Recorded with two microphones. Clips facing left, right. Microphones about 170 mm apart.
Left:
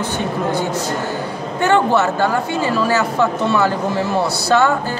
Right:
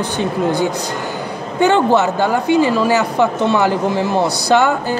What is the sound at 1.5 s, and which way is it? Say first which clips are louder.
A man's voice: right 2 dB; 15° right (ahead or behind).